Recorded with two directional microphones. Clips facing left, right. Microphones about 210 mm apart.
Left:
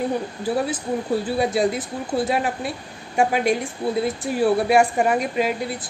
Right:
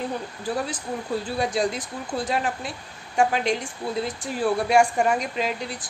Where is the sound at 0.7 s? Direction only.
5° left (ahead or behind).